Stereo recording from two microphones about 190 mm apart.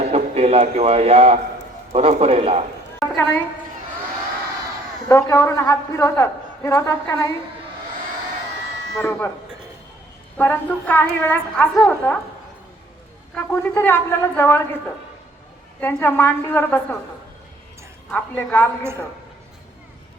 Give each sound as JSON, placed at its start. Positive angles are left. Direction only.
{"t": 0.1, "sound": "a man's voice", "side_deg": -30}
{"t": 3.0, "sound": "a sound", "side_deg": 10}
{"t": 5.0, "sound": "a man's voice", "side_deg": 15}
{"t": 9.0, "sound": "a man's voice", "side_deg": 10}
{"t": 10.3, "sound": "a man's voice", "side_deg": 10}
{"t": 13.3, "sound": "a man's voice", "side_deg": 10}
{"t": 15.8, "sound": "a man's voice", "side_deg": 10}
{"t": 18.1, "sound": "a man's voice", "side_deg": 10}
{"t": 18.8, "sound": "a woman's voice", "side_deg": -15}